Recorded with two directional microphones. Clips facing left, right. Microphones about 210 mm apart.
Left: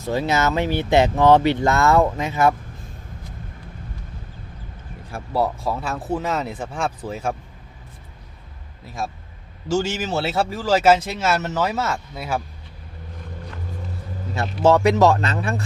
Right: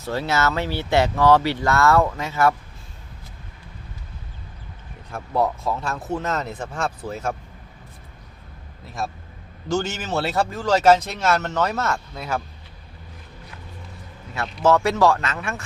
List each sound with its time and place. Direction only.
0.0 s speech: 15° left (ahead or behind)
5.1 s speech: 10° left (ahead or behind)
9.7 s speech: 5° left (ahead or behind)
14.6 s speech: 30° left (ahead or behind)
15.2 s speech: 30° left (ahead or behind)